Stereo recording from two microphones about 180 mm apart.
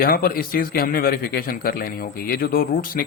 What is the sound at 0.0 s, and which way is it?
A man's voice, 55° left (ahead or behind).